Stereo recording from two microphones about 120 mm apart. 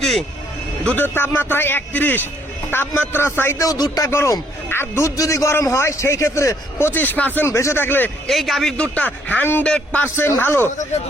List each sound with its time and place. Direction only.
0.0 s vehicle: centre (ahead or behind)
0.9 s a man's voice: 20° left (ahead or behind)
4.1 s a man's voice: 20° left (ahead or behind)
8.3 s a man's voice: centre (ahead or behind); by 10.7 s 20° left (ahead or behind)